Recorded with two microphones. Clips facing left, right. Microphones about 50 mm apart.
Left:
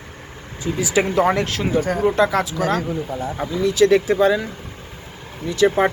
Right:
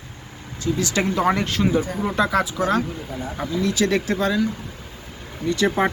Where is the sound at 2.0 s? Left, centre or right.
Centre.